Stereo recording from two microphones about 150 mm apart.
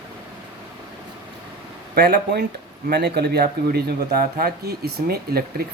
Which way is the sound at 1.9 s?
90° right.